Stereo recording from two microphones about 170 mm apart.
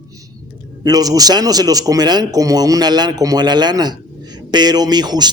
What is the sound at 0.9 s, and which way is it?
Speech, 20° right (ahead or behind).